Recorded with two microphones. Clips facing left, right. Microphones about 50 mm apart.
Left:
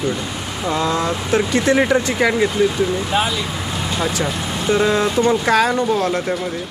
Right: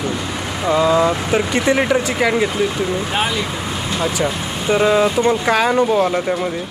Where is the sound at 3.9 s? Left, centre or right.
Centre.